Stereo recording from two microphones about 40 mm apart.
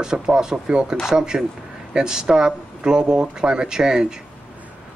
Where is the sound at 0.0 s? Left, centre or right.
Centre.